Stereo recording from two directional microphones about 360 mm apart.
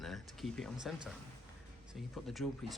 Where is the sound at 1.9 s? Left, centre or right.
Centre.